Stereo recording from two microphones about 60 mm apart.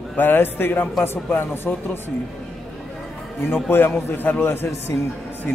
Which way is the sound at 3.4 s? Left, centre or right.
Left.